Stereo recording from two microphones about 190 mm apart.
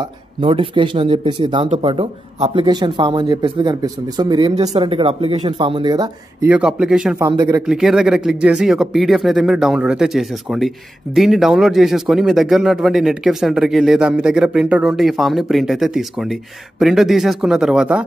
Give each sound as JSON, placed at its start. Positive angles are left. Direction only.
{"t": 0.0, "sound": "speech", "side_deg": -25}
{"t": 6.4, "sound": "speech", "side_deg": -5}
{"t": 7.2, "sound": "speech", "side_deg": -20}
{"t": 7.6, "sound": "speech", "side_deg": -5}